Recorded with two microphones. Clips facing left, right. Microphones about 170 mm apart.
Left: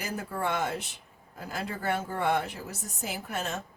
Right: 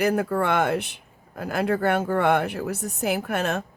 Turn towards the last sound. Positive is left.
turn(degrees=-65)  # may be behind; listen again after turning